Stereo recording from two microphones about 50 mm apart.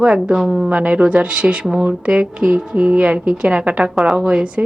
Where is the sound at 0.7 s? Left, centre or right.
Right.